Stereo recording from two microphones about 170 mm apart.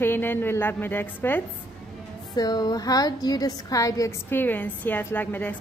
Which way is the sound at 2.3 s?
25° left (ahead or behind).